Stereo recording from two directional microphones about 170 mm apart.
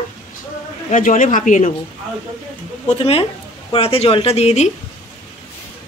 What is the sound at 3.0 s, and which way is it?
Speech, 35° left (ahead or behind).